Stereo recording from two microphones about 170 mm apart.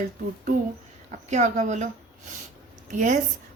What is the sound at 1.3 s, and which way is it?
Speech, 45° right (ahead or behind).